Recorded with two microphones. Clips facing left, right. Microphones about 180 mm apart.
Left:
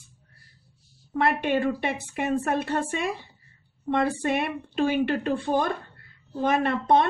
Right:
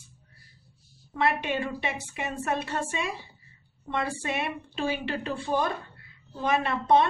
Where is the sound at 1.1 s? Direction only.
55° left (ahead or behind).